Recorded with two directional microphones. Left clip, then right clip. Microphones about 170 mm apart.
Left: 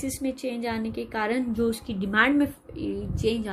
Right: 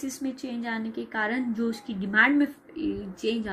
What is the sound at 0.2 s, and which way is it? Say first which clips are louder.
A woman's voice: left 4 dB; 55° left (ahead or behind).